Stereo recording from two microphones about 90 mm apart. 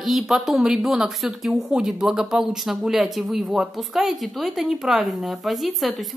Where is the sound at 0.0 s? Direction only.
Centre (ahead or behind).